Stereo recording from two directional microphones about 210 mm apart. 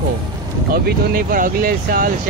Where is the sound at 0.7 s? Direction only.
45° right (ahead or behind).